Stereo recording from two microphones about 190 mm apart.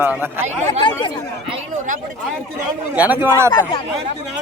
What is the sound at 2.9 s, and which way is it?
Speech, 10° right (ahead or behind).